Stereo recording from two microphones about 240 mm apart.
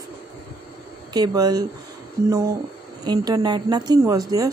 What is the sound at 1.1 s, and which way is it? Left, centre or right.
Speech, centre.